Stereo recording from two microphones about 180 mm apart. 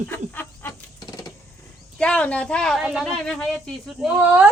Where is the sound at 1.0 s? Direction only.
20° left (ahead or behind).